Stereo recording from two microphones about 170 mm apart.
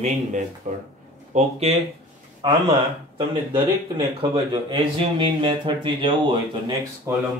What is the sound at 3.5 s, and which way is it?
Speech, 30° right (ahead or behind).